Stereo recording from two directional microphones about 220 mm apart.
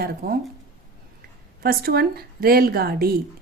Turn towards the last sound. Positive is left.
turn(degrees=-45)  # may be behind; listen again after turning